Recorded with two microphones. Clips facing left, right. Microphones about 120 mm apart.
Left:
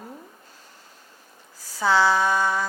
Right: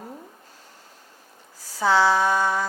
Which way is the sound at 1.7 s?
45° right (ahead or behind).